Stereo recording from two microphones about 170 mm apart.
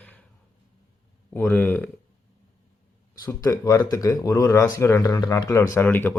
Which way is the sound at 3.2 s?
20° left (ahead or behind).